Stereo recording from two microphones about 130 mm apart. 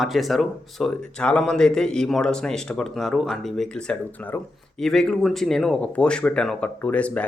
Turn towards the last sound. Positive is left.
turn(degrees=10)  # may be behind; listen again after turning